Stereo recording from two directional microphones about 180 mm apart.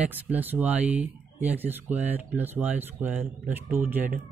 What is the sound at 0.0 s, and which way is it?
Speech, 10° right (ahead or behind).